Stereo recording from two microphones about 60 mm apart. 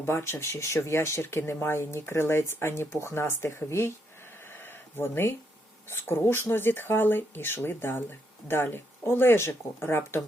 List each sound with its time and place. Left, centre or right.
0.0 s speech: left
4.4 s a sound: left
5.9 s speech: left